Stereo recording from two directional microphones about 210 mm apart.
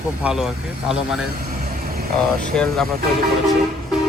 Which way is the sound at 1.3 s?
40° right (ahead or behind).